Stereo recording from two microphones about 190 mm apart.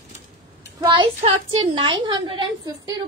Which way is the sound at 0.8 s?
25° right (ahead or behind).